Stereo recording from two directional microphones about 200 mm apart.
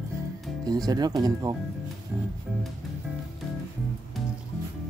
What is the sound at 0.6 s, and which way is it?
Speech, 20° right (ahead or behind).